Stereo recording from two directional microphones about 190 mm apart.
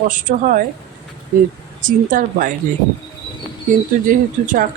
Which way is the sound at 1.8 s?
45° right (ahead or behind).